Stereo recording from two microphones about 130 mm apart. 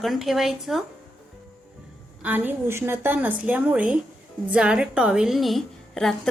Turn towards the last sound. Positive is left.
turn(degrees=5)  # may be behind; listen again after turning